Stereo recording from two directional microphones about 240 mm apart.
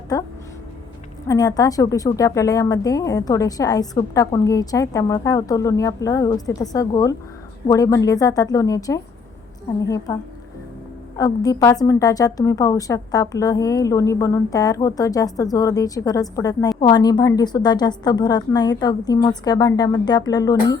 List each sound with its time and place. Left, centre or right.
0.1 s a woman's voice: centre
1.3 s a woman's voice: centre
11.2 s a woman's voice: centre